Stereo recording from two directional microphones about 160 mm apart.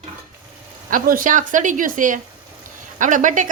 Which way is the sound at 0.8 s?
60° right (ahead or behind).